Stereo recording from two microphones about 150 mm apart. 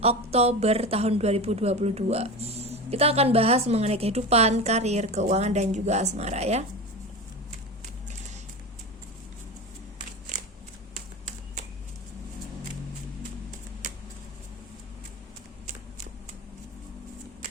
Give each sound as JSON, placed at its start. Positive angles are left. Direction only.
{"t": 0.0, "sound": "a woman's voice", "side_deg": -45}